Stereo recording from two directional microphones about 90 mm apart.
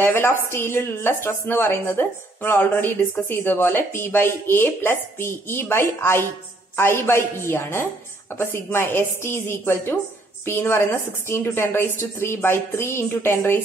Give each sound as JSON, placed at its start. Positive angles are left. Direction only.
{"t": 0.0, "sound": "a woman's voice", "side_deg": 25}